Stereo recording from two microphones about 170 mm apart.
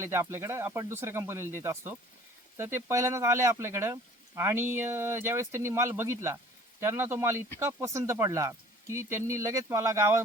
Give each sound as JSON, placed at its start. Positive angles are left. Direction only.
{"t": 0.0, "sound": "speech", "side_deg": -15}